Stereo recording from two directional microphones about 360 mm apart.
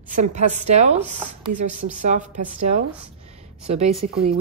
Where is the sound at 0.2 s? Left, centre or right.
Centre.